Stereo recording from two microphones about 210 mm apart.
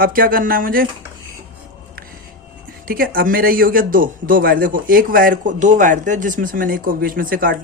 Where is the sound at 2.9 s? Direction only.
45° right (ahead or behind).